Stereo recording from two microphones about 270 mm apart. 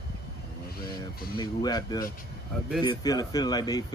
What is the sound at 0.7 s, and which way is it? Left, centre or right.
Speech, left.